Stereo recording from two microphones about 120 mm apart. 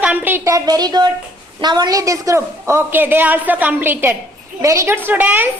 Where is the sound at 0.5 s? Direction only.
30° right (ahead or behind).